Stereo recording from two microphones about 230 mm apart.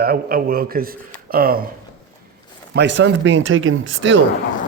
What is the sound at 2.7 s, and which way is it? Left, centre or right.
Speech, right.